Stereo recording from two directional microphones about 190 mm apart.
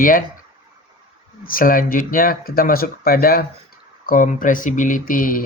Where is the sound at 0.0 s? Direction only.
45° left (ahead or behind).